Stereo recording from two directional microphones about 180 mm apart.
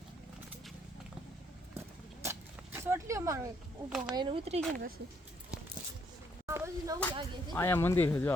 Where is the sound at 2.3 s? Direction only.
15° right (ahead or behind).